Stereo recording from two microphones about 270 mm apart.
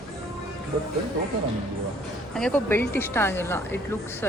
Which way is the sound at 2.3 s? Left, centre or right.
Centre.